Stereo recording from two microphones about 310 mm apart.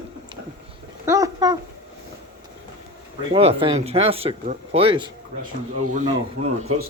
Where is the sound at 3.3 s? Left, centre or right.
Centre.